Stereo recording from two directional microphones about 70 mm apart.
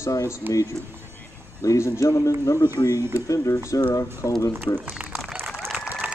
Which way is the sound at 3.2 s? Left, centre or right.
Left.